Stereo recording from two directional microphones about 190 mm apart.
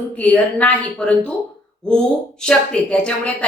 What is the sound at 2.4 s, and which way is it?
Speech, 5° left (ahead or behind).